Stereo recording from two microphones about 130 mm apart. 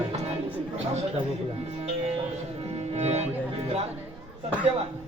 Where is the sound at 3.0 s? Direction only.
55° right (ahead or behind).